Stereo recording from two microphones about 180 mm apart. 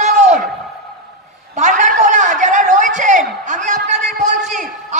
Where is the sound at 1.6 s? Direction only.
45° right (ahead or behind).